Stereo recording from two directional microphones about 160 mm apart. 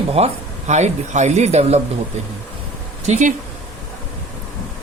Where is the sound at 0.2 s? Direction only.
40° right (ahead or behind).